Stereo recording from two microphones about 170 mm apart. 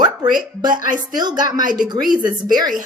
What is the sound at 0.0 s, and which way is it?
A woman's voice, 25° right (ahead or behind).